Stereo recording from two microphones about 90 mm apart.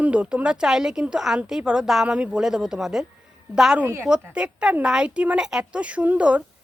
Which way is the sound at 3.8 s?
25° right (ahead or behind).